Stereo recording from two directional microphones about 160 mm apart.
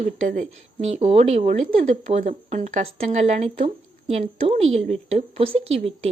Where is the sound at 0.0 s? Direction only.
55° right (ahead or behind).